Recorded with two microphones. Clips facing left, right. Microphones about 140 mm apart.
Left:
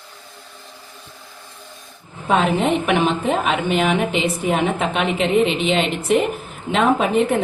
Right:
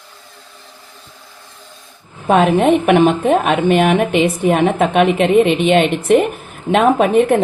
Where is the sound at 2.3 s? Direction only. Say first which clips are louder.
Right 6 dB; 55° right (ahead or behind).